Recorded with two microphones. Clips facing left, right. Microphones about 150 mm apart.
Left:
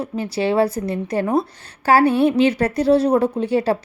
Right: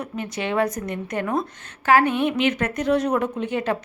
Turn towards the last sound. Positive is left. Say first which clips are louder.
# left 6 dB
turn(degrees=35)  # may be behind; listen again after turning